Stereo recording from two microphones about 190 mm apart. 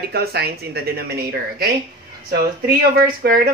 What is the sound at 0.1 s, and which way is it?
A woman's voice, 55° right (ahead or behind).